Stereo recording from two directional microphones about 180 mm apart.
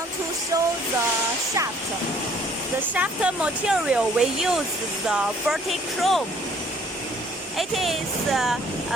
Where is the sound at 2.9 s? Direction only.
10° right (ahead or behind).